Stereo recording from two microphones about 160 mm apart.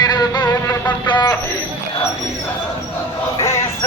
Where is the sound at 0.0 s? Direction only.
25° left (ahead or behind).